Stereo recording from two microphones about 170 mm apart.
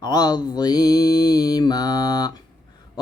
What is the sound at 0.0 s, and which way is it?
Mantra, 25° left (ahead or behind).